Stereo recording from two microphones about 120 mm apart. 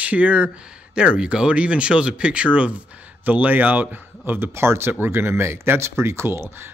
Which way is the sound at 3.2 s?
15° right (ahead or behind).